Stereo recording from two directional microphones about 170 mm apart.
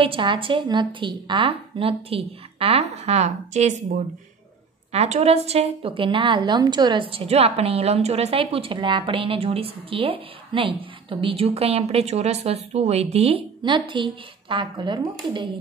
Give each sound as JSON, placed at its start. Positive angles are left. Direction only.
{"t": 0.0, "sound": "a woman's voice", "side_deg": -30}